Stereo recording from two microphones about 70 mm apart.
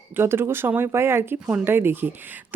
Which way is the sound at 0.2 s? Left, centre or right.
Right.